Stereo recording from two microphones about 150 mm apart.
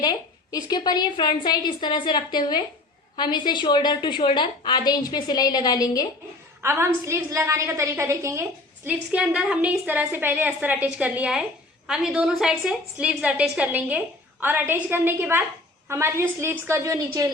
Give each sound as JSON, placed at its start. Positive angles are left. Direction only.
{"t": 0.0, "sound": "a woman's voice", "side_deg": 25}
{"t": 6.6, "sound": "a woman's voice", "side_deg": -15}